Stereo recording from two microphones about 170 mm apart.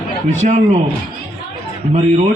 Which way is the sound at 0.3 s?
40° right (ahead or behind).